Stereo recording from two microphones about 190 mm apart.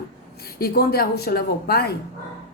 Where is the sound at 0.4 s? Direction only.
55° left (ahead or behind).